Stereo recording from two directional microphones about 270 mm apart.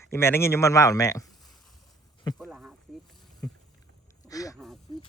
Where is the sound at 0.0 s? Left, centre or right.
Centre.